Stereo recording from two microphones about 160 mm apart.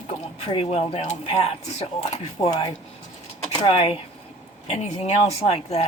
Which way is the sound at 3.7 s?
35° left (ahead or behind).